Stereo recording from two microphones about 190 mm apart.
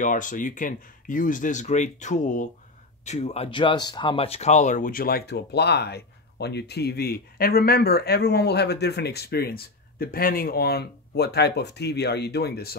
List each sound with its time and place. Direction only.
0.0 s speech: 45° left (ahead or behind)